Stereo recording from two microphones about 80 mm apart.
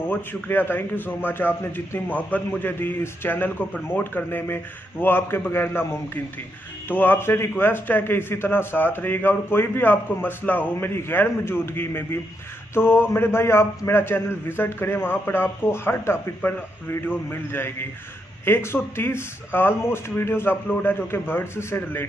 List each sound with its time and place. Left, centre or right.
0.0 s a man's voice: left
2.0 s a man's voice: left
16.3 s speech: centre
17.0 s a man's voice: left